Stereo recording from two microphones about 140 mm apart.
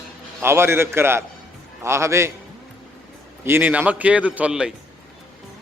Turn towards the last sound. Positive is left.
turn(degrees=-5)  # may be behind; listen again after turning